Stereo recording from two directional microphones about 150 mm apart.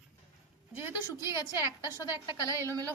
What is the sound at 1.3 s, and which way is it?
A woman's voice, 25° left (ahead or behind).